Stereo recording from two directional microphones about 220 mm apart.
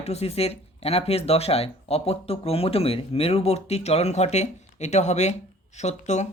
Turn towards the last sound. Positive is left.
turn(degrees=30)  # may be behind; listen again after turning